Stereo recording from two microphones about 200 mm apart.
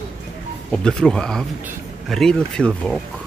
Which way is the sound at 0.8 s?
5° left (ahead or behind).